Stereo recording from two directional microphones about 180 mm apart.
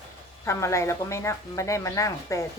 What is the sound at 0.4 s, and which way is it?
Speech, 15° left (ahead or behind).